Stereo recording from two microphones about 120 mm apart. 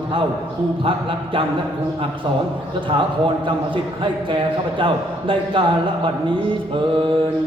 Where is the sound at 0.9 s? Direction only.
45° right (ahead or behind).